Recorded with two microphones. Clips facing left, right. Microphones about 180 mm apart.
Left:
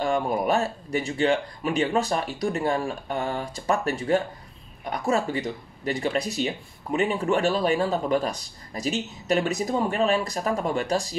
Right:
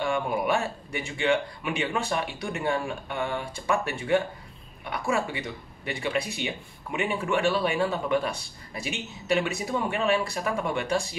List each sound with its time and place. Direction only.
0.0 s speech: 40° left (ahead or behind)